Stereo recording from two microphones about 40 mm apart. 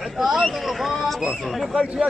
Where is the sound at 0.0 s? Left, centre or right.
Centre.